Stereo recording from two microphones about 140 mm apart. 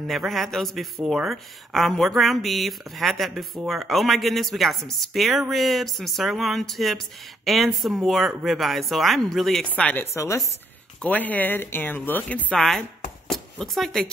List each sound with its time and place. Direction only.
0.0 s speech: centre (ahead or behind)
10.1 s speech: 20° left (ahead or behind)
11.0 s speech: 10° left (ahead or behind)
12.4 s speech: centre (ahead or behind)